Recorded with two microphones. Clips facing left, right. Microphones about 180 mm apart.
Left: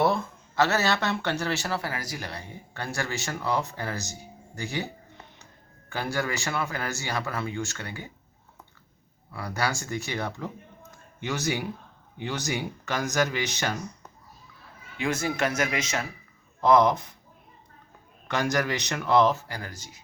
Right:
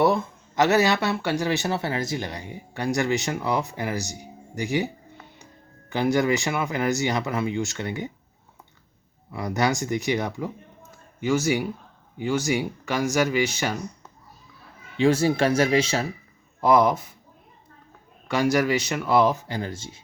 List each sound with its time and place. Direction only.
0.1 s speech: 15° right (ahead or behind)
5.9 s speech: 20° right (ahead or behind)
9.3 s speech: 20° right (ahead or behind)
12.2 s speech: 10° right (ahead or behind)
14.9 s speech: 30° right (ahead or behind)
16.6 s speech: 10° right (ahead or behind)
18.3 s speech: 10° right (ahead or behind); by 20.0 s 25° right (ahead or behind)